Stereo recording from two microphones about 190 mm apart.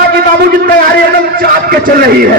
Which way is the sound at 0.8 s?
55° right (ahead or behind).